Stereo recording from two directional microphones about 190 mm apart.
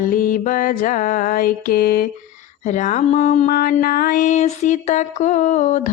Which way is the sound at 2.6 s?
40° left (ahead or behind).